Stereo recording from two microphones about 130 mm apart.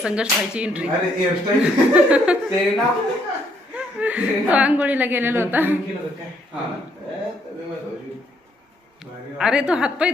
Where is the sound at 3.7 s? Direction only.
10° right (ahead or behind).